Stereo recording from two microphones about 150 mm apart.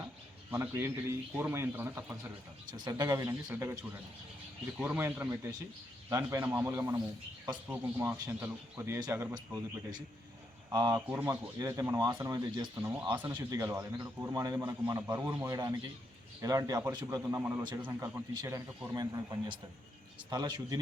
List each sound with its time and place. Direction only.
0.5 s speech: 15° right (ahead or behind)
2.7 s a man's voice: 30° right (ahead or behind)
4.8 s a man's voice: 15° right (ahead or behind)
11.1 s speech: 10° right (ahead or behind)
11.6 s a man's voice: 25° right (ahead or behind)
13.1 s a man's voice: 10° right (ahead or behind); by 20.7 s 30° right (ahead or behind)